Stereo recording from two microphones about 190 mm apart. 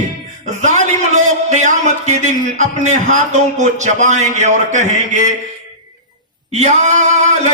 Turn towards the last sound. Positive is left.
turn(degrees=-40)  # may be behind; listen again after turning